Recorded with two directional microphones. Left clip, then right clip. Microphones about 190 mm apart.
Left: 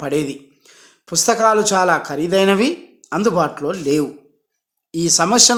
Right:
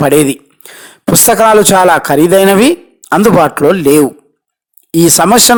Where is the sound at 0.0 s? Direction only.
50° right (ahead or behind).